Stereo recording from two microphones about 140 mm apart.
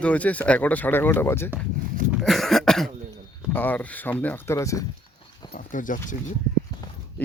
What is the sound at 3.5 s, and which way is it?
Speech, 15° left (ahead or behind).